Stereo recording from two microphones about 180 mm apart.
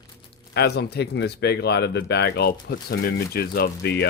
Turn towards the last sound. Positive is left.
turn(degrees=60)  # may be behind; listen again after turning